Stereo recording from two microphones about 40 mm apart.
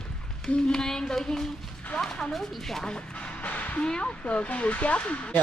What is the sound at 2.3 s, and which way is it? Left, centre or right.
Speech, centre.